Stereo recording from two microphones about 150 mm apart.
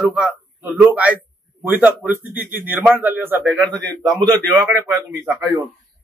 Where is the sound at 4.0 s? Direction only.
25° right (ahead or behind).